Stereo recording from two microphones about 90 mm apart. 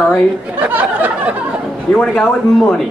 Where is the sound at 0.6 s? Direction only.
20° right (ahead or behind).